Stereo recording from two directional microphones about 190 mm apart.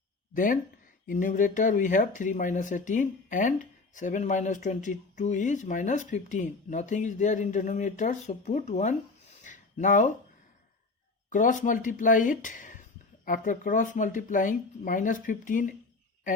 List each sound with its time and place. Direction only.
0.3 s speech: 45° left (ahead or behind)
9.4 s a sound: 40° left (ahead or behind)
11.3 s speech: 40° left (ahead or behind)